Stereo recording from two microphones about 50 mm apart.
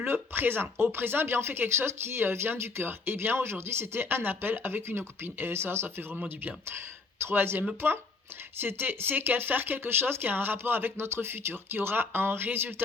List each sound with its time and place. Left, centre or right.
0.1 s speech: right
7.8 s speech: right